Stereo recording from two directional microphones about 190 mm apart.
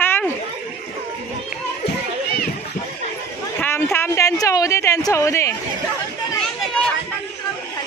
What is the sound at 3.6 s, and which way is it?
A man's voice, 10° left (ahead or behind).